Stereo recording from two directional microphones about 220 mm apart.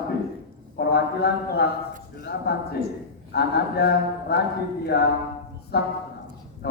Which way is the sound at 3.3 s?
45° left (ahead or behind).